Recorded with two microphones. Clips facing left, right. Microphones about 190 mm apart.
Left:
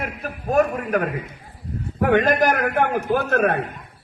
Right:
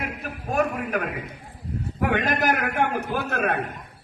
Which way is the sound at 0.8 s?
45° left (ahead or behind).